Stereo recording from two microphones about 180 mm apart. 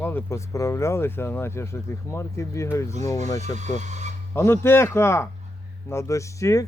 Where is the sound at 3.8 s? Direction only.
40° right (ahead or behind).